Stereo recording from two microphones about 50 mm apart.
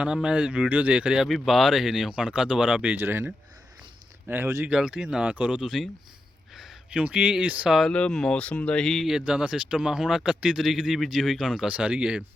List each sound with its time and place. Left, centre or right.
0.0 s speech: centre
1.3 s speech: centre
2.1 s speech: right
3.0 s speech: right
4.3 s speech: right
4.8 s speech: centre
5.2 s speech: right
5.6 s speech: centre
6.5 s a sound: centre
6.9 s speech: right
7.9 s speech: centre
9.0 s speech: centre
11.7 s speech: right